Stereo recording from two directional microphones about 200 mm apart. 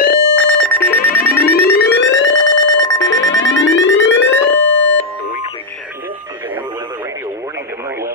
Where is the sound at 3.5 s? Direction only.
70° left (ahead or behind).